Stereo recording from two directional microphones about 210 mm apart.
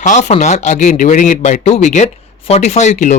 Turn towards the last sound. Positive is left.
turn(degrees=35)  # may be behind; listen again after turning